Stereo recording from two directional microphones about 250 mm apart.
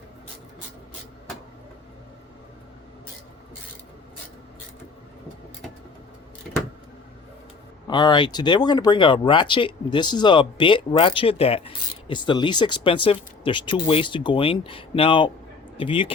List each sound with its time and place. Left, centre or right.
7.9 s speech: centre